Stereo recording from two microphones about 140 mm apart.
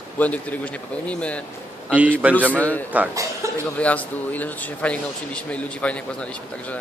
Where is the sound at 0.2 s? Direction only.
10° left (ahead or behind).